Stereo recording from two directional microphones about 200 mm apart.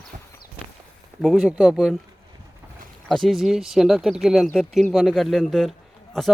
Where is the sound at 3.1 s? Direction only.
Centre (ahead or behind).